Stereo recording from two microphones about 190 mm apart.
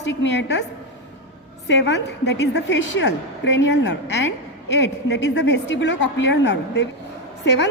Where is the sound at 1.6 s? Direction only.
65° left (ahead or behind).